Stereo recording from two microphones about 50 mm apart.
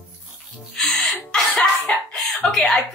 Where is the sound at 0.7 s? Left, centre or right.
Centre.